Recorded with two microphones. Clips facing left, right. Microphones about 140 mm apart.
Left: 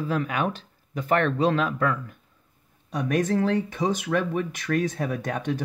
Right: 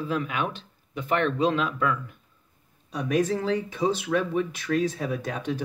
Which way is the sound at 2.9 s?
50° left (ahead or behind).